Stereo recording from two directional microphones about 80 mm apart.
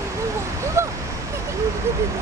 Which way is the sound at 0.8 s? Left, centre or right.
Right.